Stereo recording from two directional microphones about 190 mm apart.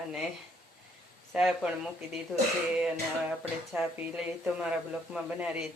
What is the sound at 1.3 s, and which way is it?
Speech, 5° right (ahead or behind).